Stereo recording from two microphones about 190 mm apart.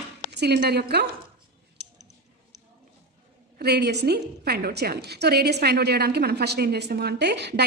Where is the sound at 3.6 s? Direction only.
60° right (ahead or behind).